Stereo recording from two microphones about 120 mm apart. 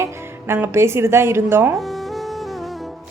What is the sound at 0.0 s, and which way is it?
A woman's voice, 20° right (ahead or behind).